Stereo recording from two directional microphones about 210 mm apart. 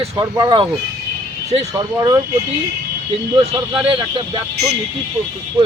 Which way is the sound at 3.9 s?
20° right (ahead or behind).